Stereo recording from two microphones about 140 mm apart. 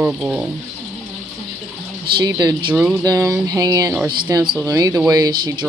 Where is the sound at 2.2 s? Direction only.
30° right (ahead or behind).